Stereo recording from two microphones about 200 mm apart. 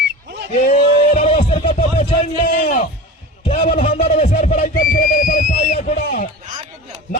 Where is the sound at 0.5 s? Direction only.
35° left (ahead or behind).